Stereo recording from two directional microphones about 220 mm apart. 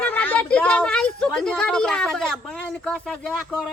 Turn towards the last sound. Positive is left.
turn(degrees=5)  # may be behind; listen again after turning